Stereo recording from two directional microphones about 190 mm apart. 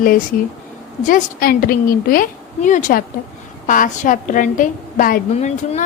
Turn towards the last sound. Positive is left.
turn(degrees=35)  # may be behind; listen again after turning